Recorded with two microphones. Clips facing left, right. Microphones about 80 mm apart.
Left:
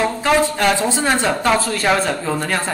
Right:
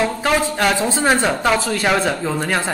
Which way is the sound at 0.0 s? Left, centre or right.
Centre.